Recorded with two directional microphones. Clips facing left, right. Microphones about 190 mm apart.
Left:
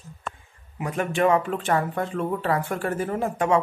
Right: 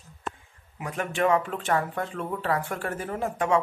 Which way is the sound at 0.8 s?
15° left (ahead or behind).